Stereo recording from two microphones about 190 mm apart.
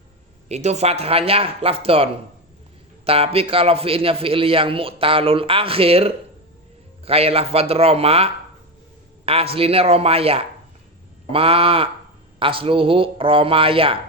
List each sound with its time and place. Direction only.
0.4 s a man's voice: 35° right (ahead or behind)